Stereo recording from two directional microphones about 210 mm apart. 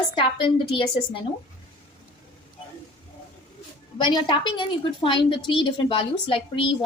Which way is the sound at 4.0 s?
20° left (ahead or behind).